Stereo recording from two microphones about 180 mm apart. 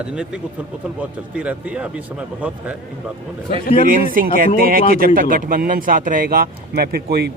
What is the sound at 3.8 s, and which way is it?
Speech, 50° right (ahead or behind).